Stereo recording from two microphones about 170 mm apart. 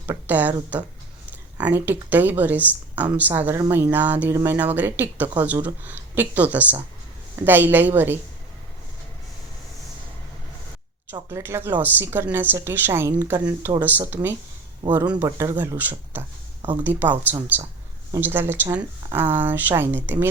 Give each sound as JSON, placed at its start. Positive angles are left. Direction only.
{"t": 0.0, "sound": "speech", "side_deg": -10}
{"t": 11.1, "sound": "speech", "side_deg": -15}